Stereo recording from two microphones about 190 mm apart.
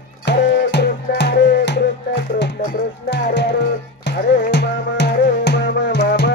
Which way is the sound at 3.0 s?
65° left (ahead or behind).